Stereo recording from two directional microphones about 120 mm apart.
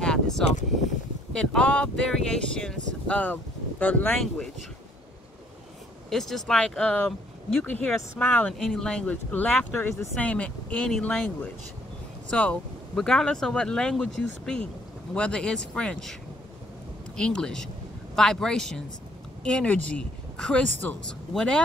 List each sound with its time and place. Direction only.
0.0 s a sound: 5° left (ahead or behind)
1.3 s speech: 5° left (ahead or behind)
6.0 s speech: centre (ahead or behind)
12.3 s speech: 10° left (ahead or behind)
17.2 s speech: 5° left (ahead or behind)